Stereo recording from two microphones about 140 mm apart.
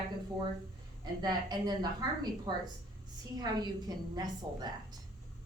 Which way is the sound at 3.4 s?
30° right (ahead or behind).